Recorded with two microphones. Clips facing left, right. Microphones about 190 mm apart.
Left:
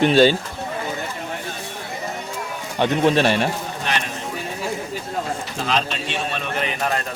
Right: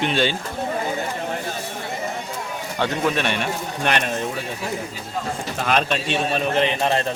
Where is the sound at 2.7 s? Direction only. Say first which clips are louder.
Left 5 dB; 20° left (ahead or behind); by 3.5 s 35° left (ahead or behind).